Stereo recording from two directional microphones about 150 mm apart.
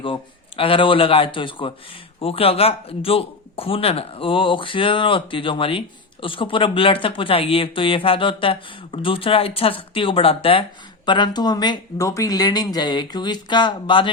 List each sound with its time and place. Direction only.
0.0 s speech: 35° left (ahead or behind)